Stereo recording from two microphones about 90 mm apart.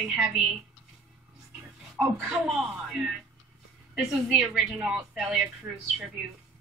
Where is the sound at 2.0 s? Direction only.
5° right (ahead or behind).